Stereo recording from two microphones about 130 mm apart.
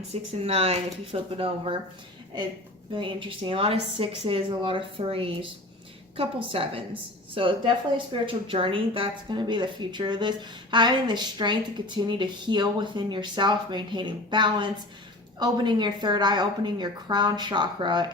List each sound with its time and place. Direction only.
0.1 s speech: 50° right (ahead or behind)
2.9 s a woman's voice: 40° right (ahead or behind)